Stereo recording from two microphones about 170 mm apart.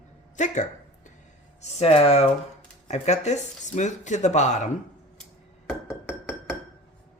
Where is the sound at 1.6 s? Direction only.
35° left (ahead or behind).